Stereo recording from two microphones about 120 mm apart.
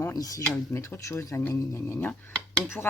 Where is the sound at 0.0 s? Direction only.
30° left (ahead or behind).